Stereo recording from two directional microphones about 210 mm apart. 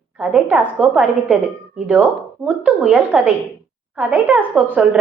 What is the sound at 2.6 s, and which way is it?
A woman's voice, 5° right (ahead or behind).